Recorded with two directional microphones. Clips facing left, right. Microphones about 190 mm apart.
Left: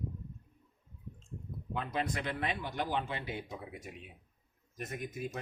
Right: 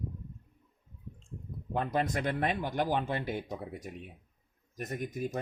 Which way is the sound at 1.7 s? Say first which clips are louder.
Right 5 dB; 45° right (ahead or behind).